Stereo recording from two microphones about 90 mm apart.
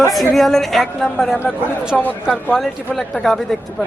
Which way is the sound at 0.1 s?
Centre (ahead or behind).